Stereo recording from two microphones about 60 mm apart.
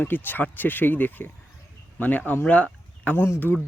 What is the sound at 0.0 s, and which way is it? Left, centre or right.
Speech, left.